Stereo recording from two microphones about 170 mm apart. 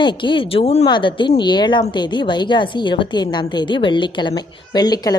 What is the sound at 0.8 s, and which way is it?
A woman's voice, 30° left (ahead or behind).